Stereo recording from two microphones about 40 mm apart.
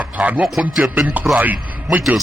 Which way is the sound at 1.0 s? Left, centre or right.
Right.